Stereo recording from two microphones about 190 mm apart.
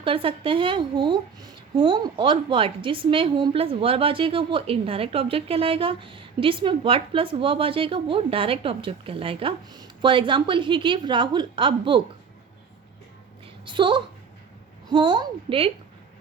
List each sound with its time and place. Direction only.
0.0 s a woman's voice: 30° right (ahead or behind)
13.7 s a woman's voice: 25° right (ahead or behind)